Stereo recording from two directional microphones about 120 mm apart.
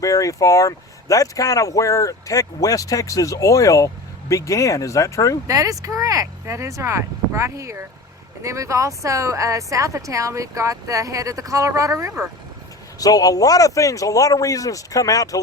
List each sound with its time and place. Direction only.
0.0 s speech: 30° left (ahead or behind)
5.5 s speech: 30° right (ahead or behind)
13.0 s speech: 30° left (ahead or behind)